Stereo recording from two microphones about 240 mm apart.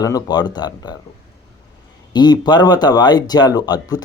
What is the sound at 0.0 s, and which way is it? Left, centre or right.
Speech, centre.